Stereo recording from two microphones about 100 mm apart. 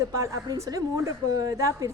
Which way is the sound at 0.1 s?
30° right (ahead or behind).